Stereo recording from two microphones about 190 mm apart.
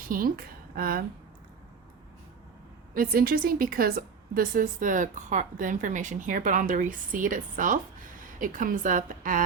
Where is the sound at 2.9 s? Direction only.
50° right (ahead or behind).